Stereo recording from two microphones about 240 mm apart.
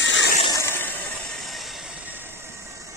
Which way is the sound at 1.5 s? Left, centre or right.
Centre.